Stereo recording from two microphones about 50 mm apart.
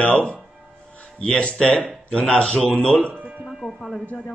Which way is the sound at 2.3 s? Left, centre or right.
Centre.